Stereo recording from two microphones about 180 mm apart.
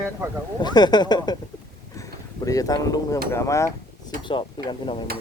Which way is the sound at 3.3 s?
15° left (ahead or behind).